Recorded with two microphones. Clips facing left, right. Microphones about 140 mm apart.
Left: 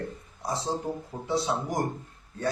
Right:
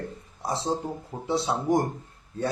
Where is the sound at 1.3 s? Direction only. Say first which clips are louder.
Right 4 dB; 25° right (ahead or behind).